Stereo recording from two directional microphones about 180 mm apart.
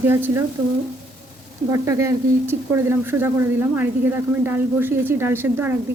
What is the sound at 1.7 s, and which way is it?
Speech, 15° right (ahead or behind).